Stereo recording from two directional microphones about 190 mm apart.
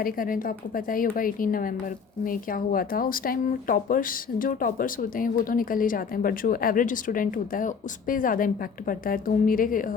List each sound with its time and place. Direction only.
0.0 s speech: 45° left (ahead or behind)